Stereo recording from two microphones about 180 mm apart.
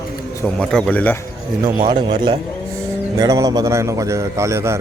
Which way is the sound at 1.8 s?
30° right (ahead or behind).